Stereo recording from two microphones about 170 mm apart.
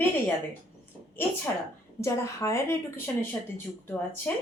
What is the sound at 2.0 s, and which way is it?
Speech, 15° left (ahead or behind).